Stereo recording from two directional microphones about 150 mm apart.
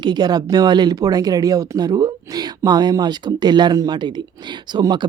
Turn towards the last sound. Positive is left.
turn(degrees=-30)  # may be behind; listen again after turning